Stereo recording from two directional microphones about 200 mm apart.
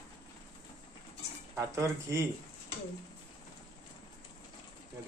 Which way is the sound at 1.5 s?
15° right (ahead or behind).